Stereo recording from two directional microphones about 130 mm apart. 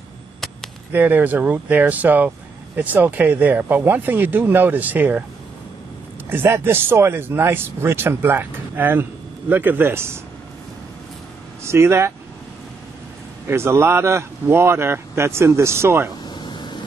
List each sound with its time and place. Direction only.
0.9 s speech: 15° right (ahead or behind)
6.2 s speech: 15° right (ahead or behind)
11.6 s speech: 20° right (ahead or behind)
13.5 s speech: 20° right (ahead or behind)
16.3 s a sound: 35° left (ahead or behind)